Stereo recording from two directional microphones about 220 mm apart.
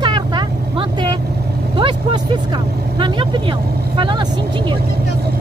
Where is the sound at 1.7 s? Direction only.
20° right (ahead or behind).